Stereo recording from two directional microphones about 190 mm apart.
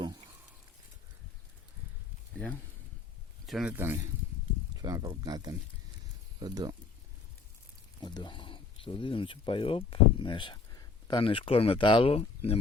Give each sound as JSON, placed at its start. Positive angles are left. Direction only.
{"t": 0.0, "sound": "frying", "side_deg": -20}
{"t": 3.4, "sound": "speech", "side_deg": 0}
{"t": 8.0, "sound": "speech", "side_deg": 25}